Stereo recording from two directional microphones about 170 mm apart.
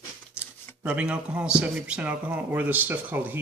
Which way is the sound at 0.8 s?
10° right (ahead or behind).